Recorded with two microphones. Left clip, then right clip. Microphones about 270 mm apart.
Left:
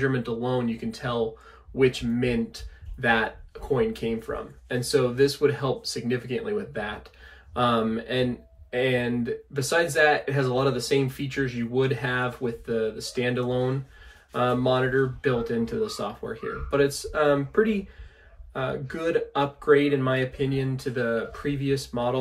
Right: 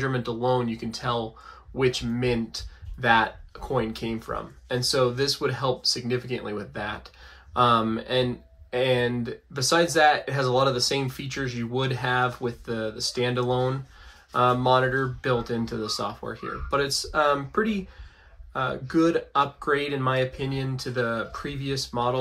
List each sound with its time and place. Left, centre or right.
0.0 s speech: centre